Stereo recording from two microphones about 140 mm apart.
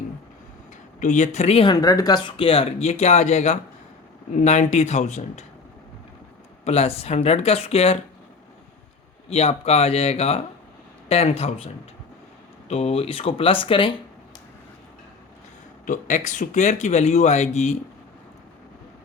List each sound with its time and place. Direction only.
0.9 s speech: 60° left (ahead or behind)
1.7 s speech: 25° left (ahead or behind)
2.3 s speech: 40° left (ahead or behind)
6.7 s speech: 50° left (ahead or behind)
9.3 s speech: 50° left (ahead or behind)
15.9 s speech: 60° left (ahead or behind)